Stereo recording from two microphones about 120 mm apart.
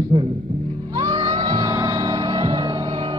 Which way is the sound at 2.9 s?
50° right (ahead or behind).